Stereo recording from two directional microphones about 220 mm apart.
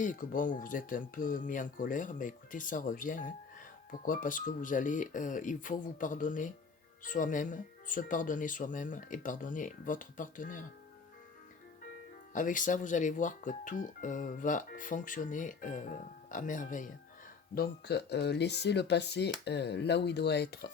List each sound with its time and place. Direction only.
0.0 s speech: 35° left (ahead or behind)
12.3 s speech: 35° left (ahead or behind)